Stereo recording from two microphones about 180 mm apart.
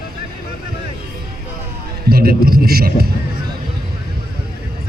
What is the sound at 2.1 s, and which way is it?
Speech, 55° right (ahead or behind).